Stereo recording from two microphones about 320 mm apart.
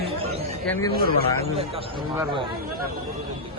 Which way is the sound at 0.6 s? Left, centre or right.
Centre.